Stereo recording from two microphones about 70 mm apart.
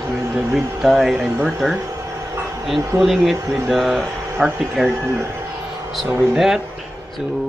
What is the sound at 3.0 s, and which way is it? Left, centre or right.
Speech, centre.